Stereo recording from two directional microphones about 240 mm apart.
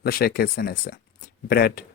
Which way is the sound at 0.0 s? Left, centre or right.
Left.